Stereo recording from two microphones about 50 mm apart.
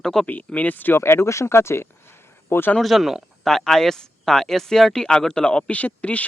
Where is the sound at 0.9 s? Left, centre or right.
Left.